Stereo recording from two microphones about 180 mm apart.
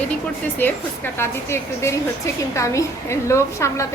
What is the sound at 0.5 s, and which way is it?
A woman's voice, 10° left (ahead or behind).